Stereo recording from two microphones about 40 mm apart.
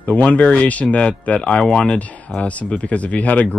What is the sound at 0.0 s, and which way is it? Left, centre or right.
Speech, left.